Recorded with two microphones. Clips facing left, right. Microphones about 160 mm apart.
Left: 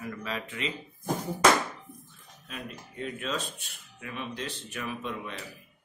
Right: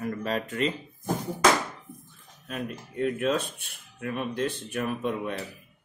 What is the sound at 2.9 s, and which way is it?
Speech, 55° right (ahead or behind).